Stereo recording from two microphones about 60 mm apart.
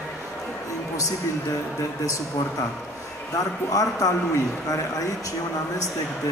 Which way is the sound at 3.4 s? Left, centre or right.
Left.